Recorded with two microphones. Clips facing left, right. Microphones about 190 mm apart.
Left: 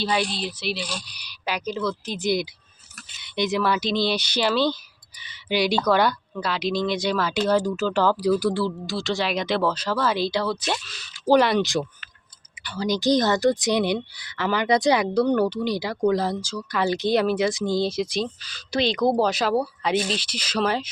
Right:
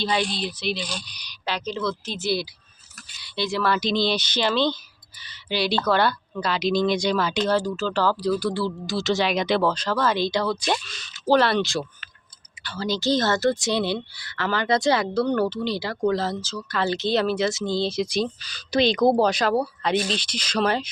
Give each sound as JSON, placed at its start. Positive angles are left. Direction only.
{"t": 0.0, "sound": "speech", "side_deg": 5}
{"t": 8.5, "sound": "speech", "side_deg": 0}
{"t": 18.4, "sound": "speech", "side_deg": -15}
{"t": 19.0, "sound": "speech", "side_deg": 0}